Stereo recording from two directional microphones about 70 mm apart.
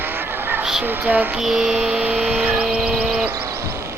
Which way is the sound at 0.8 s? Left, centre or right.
Right.